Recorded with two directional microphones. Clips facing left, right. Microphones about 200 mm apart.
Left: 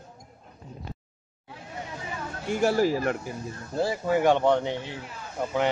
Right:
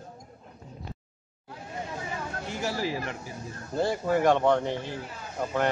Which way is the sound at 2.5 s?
50° left (ahead or behind).